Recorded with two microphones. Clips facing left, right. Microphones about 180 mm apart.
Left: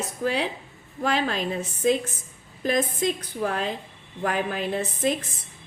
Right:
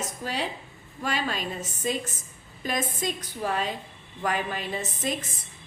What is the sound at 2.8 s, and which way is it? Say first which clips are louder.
A woman's voice: left 4 dB; 55° left (ahead or behind).